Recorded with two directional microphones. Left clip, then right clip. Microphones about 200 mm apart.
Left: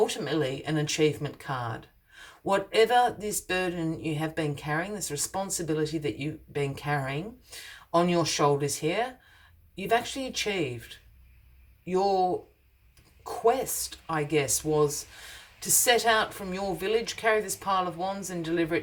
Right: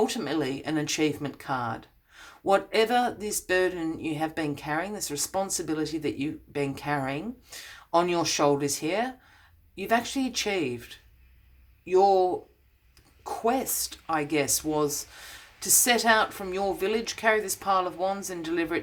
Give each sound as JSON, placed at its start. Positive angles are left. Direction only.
{"t": 0.0, "sound": "speech", "side_deg": -30}